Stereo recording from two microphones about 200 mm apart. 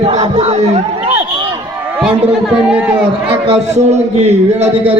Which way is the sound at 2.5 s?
5° right (ahead or behind).